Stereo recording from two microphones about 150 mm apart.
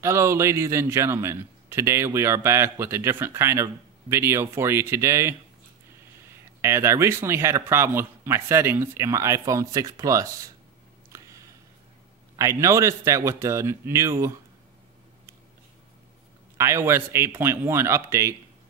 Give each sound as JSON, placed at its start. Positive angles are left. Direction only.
{"t": 0.0, "sound": "a man's voice", "side_deg": -20}
{"t": 6.6, "sound": "a man's voice", "side_deg": -15}
{"t": 11.1, "sound": "a sound", "side_deg": -20}
{"t": 12.4, "sound": "speech", "side_deg": -20}
{"t": 16.5, "sound": "a man's voice", "side_deg": -20}